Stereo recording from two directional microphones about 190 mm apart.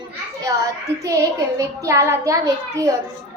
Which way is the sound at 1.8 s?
15° right (ahead or behind).